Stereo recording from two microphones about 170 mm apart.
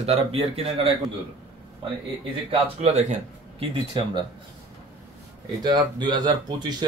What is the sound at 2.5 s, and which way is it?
Speech, 40° right (ahead or behind).